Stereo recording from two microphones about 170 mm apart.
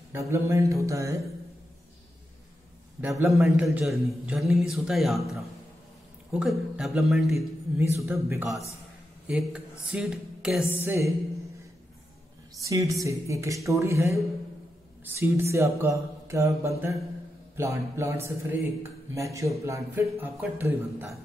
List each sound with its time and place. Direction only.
0.1 s a sound: 15° right (ahead or behind)
3.0 s speech: 15° right (ahead or behind)
3.4 s a man's voice: 5° right (ahead or behind)
6.4 s a man's voice: centre (ahead or behind)
10.8 s speech: 15° right (ahead or behind)
12.5 s speech: 20° right (ahead or behind)